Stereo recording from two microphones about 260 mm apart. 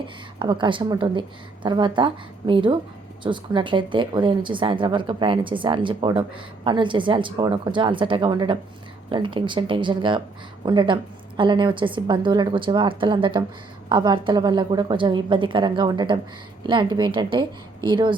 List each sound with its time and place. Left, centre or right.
0.3 s a woman's voice: centre